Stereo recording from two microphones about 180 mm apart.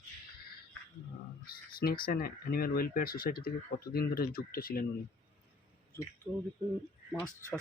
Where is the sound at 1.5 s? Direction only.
60° left (ahead or behind).